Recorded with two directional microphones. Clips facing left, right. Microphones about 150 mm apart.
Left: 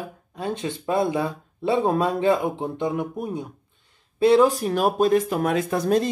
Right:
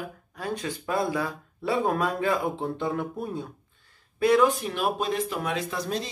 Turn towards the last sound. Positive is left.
turn(degrees=50)  # may be behind; listen again after turning